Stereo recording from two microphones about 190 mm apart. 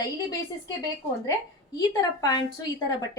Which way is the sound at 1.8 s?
20° left (ahead or behind).